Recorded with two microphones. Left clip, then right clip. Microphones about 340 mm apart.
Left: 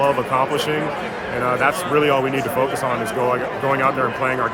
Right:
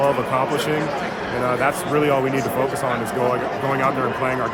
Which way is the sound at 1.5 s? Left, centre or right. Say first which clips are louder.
Left 3 dB; centre.